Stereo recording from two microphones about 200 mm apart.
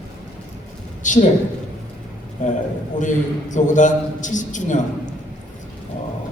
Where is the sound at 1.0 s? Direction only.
40° left (ahead or behind).